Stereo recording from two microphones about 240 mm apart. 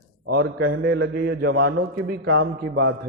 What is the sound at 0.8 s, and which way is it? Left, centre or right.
A man's voice, right.